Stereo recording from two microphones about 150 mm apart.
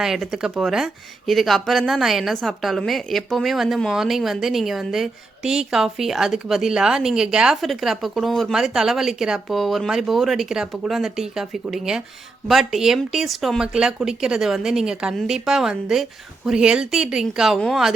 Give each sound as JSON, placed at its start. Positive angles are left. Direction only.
{"t": 0.0, "sound": "a woman's voice", "side_deg": -5}